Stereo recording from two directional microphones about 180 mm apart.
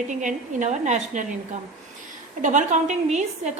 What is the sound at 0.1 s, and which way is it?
A woman's voice, 45° right (ahead or behind).